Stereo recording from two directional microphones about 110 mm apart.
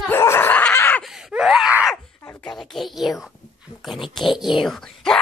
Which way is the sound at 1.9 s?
25° left (ahead or behind).